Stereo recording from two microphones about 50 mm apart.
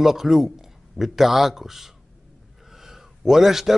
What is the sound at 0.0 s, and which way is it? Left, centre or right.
A man's voice, centre.